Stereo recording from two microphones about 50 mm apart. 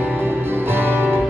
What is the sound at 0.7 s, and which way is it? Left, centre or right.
Music, right.